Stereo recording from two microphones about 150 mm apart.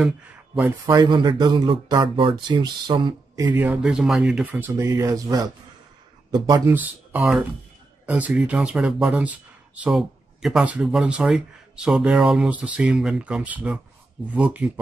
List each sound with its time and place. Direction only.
0.7 s speech: 25° right (ahead or behind)
3.5 s speech: 10° right (ahead or behind)
6.7 s speech: 10° right (ahead or behind)